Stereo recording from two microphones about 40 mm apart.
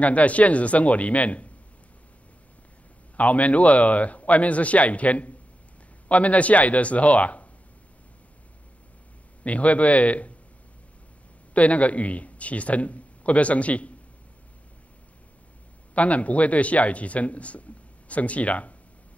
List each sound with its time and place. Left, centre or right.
0.0 s speech: left
3.2 s speech: left
9.4 s speech: left
11.5 s a man's voice: left
15.9 s speech: left